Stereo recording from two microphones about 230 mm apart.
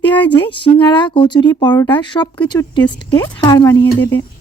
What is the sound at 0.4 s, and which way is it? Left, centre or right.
Speech, left.